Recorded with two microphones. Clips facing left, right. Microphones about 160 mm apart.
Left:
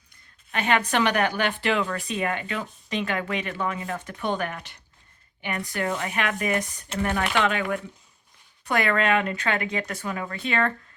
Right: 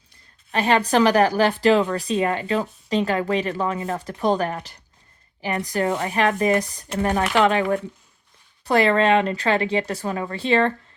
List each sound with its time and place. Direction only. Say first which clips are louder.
0.5 s a woman's voice: right 5 dB; 35° right (ahead or behind)